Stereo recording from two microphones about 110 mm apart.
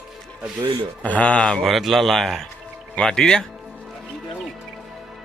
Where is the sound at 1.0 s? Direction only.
15° left (ahead or behind).